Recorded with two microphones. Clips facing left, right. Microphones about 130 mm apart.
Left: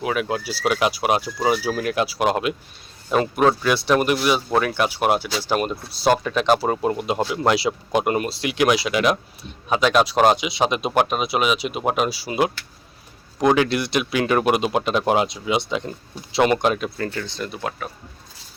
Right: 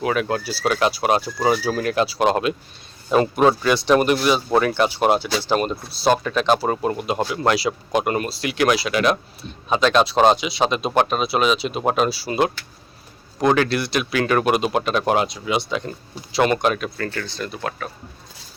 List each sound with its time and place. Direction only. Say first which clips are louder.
0.0 s speech: right 2 dB; 5° left (ahead or behind)
3.1 s speech: right 2 dB; centre (ahead or behind); by 9.6 s 15° left (ahead or behind)
9.6 s speech: right 1 dB; 5° left (ahead or behind)
13.5 s speech: even; 15° left (ahead or behind)